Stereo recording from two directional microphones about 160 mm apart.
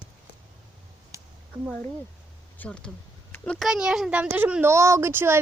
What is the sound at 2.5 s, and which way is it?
Speech, 5° left (ahead or behind).